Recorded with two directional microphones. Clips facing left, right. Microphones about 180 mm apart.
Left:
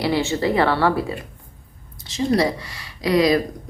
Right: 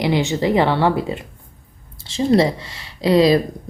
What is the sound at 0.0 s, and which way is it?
Speech, 20° right (ahead or behind).